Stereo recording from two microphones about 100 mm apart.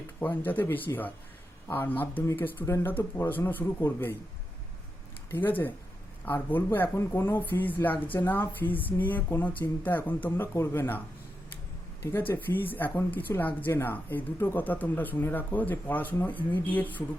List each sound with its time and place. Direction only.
0.2 s speech: 20° left (ahead or behind)
5.3 s speech: 20° left (ahead or behind)
12.1 s speech: 20° left (ahead or behind)